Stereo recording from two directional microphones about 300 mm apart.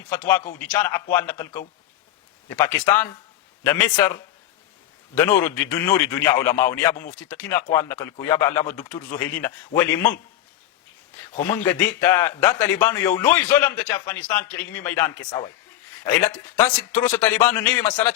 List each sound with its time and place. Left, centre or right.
0.1 s a man's voice: centre
5.4 s a man's voice: centre
11.4 s a man's voice: centre
17.0 s a man's voice: centre